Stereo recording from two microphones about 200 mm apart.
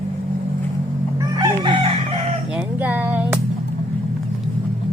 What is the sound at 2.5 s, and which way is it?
Music, 5° right (ahead or behind).